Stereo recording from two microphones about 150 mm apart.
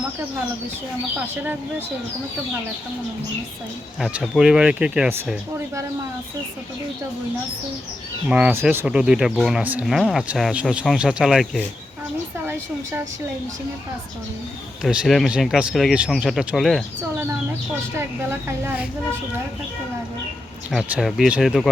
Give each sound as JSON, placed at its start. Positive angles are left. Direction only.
{"t": 4.0, "sound": "speech", "side_deg": -5}
{"t": 8.3, "sound": "speech", "side_deg": -10}
{"t": 14.8, "sound": "speech", "side_deg": 0}
{"t": 17.9, "sound": "speech", "side_deg": -15}
{"t": 20.9, "sound": "speech", "side_deg": -5}